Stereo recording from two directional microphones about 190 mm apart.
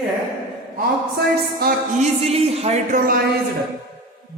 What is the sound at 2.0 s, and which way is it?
Speech, 30° right (ahead or behind).